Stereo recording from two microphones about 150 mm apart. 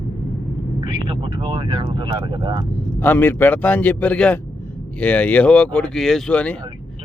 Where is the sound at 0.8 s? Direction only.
30° right (ahead or behind).